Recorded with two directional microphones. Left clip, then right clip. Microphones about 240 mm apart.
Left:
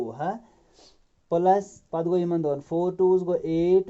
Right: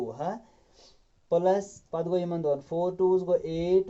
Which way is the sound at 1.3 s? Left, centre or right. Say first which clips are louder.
Left 3 dB; left.